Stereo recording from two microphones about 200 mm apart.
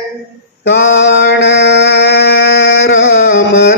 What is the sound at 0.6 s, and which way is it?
Mantra, 60° left (ahead or behind).